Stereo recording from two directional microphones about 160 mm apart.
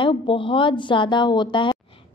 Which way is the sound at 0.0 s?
30° left (ahead or behind).